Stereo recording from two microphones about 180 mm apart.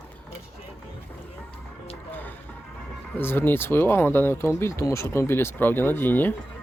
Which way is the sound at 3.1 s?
10° left (ahead or behind).